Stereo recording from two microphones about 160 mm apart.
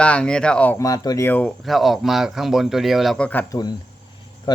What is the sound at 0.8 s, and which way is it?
Speech, 20° left (ahead or behind).